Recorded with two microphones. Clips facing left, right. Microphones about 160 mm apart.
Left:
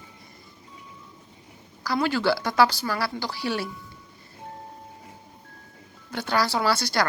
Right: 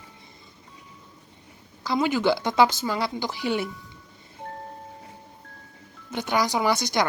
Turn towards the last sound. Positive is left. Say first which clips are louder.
# right 1 dB
turn(degrees=-20)  # may be behind; listen again after turning